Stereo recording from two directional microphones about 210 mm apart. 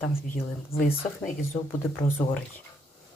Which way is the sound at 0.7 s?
45° left (ahead or behind).